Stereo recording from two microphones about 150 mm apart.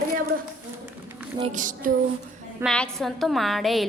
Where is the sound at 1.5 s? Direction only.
60° right (ahead or behind).